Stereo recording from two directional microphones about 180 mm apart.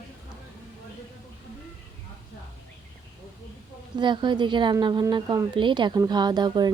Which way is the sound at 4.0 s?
25° right (ahead or behind).